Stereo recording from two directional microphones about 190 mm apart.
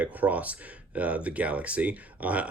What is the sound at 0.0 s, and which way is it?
Speech, 10° right (ahead or behind).